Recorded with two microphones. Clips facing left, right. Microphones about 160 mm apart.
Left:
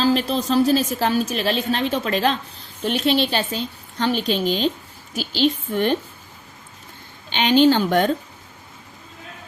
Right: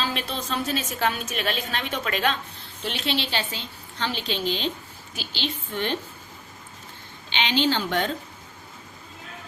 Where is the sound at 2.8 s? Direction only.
45° left (ahead or behind).